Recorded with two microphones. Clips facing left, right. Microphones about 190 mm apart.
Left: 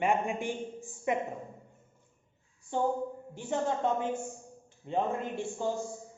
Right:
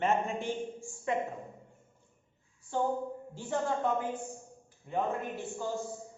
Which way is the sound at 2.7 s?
20° left (ahead or behind).